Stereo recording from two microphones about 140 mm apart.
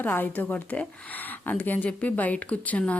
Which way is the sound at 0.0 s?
15° left (ahead or behind).